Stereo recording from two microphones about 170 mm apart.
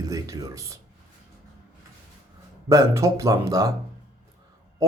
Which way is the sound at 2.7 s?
20° right (ahead or behind).